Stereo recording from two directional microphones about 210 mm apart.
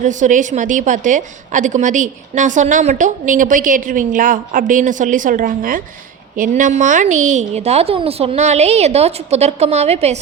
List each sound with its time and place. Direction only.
0.0 s a woman's voice: 35° right (ahead or behind)